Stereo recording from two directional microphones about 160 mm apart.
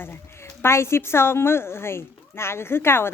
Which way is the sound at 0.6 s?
15° left (ahead or behind).